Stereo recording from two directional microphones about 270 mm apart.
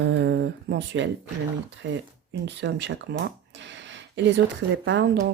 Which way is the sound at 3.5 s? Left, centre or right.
Right.